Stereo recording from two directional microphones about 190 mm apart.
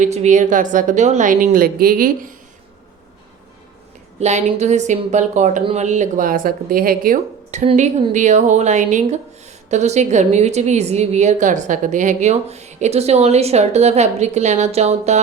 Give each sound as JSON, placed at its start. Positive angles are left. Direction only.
{"t": 0.0, "sound": "a woman's voice", "side_deg": -35}
{"t": 4.2, "sound": "a woman's voice", "side_deg": -35}